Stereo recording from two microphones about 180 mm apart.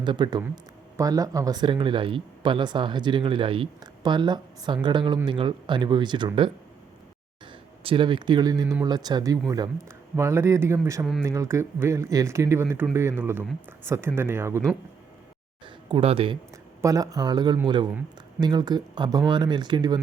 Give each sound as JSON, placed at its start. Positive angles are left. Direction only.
{"t": 0.0, "sound": "speech", "side_deg": -25}
{"t": 7.9, "sound": "speech", "side_deg": -30}
{"t": 15.6, "sound": "speech", "side_deg": -30}
{"t": 16.8, "sound": "speech", "side_deg": -20}